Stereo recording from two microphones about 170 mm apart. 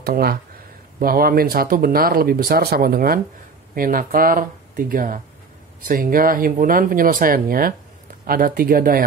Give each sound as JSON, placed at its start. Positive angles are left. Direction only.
{"t": 0.0, "sound": "speech", "side_deg": -65}